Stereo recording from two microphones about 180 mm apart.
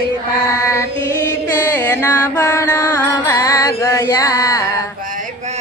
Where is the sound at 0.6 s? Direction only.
15° left (ahead or behind).